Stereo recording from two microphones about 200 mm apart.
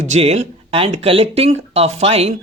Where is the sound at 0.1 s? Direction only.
30° right (ahead or behind).